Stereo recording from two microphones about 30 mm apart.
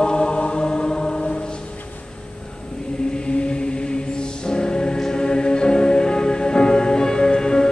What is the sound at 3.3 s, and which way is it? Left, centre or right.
Music, left.